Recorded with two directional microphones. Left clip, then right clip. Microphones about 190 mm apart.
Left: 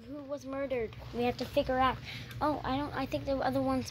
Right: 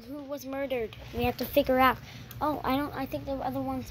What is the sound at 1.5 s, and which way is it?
Speech, 35° right (ahead or behind).